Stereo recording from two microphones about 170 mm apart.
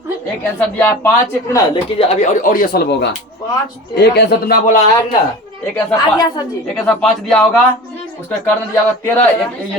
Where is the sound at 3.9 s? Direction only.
75° left (ahead or behind); by 4.8 s 55° left (ahead or behind).